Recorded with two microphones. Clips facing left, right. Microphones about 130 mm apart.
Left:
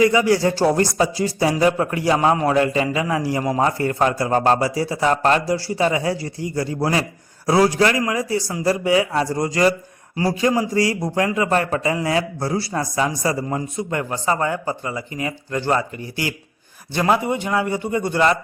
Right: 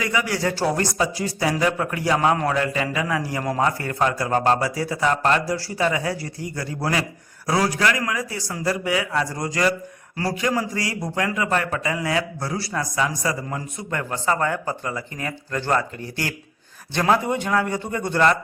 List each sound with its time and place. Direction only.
0.0 s a man's voice: 25° left (ahead or behind)